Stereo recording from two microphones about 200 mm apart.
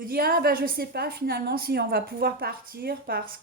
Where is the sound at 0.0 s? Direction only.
50° right (ahead or behind).